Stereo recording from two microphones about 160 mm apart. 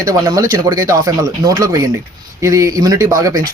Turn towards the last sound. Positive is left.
turn(degrees=-20)  # may be behind; listen again after turning